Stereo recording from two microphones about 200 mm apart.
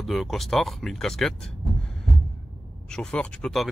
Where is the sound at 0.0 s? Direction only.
Centre (ahead or behind).